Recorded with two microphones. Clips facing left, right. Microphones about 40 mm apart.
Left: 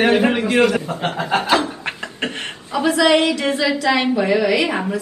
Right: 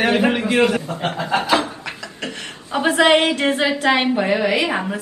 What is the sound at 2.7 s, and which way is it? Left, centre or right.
A woman's voice, right.